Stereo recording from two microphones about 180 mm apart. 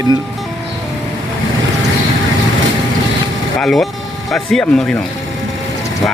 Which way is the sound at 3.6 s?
Centre (ahead or behind).